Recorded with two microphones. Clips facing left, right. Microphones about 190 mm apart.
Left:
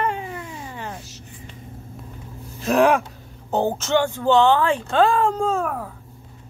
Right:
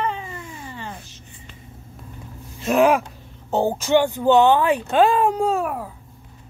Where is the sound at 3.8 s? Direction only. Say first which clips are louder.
Right 3 dB; 15° right (ahead or behind).